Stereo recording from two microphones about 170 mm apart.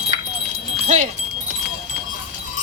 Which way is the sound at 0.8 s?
45° right (ahead or behind).